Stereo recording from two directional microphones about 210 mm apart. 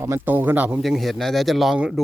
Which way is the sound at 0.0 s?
10° right (ahead or behind).